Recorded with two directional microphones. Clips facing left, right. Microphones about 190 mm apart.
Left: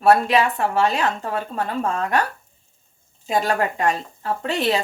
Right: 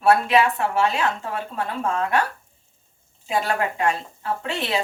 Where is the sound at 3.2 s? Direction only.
40° left (ahead or behind).